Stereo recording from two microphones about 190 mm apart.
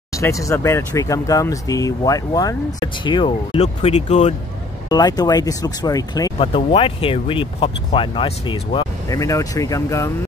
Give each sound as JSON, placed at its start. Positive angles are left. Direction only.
{"t": 0.1, "sound": "speech", "side_deg": 15}
{"t": 4.8, "sound": "speech", "side_deg": 20}
{"t": 6.3, "sound": "speech", "side_deg": 30}